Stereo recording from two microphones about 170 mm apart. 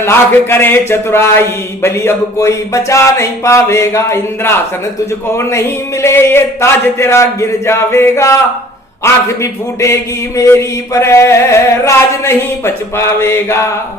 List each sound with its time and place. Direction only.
0.0 s a man's voice: 15° left (ahead or behind)